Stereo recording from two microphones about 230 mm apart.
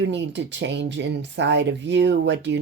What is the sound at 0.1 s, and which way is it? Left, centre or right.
Speech, right.